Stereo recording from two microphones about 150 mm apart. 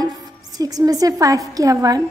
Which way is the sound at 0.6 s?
25° right (ahead or behind).